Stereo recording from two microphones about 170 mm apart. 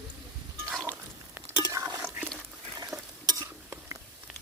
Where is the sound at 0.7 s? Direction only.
5° right (ahead or behind).